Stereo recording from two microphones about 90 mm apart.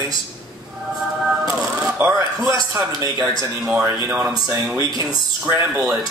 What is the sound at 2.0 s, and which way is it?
Speech, 35° right (ahead or behind).